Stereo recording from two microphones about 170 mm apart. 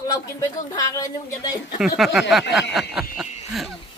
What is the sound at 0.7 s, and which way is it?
Speech, 20° left (ahead or behind).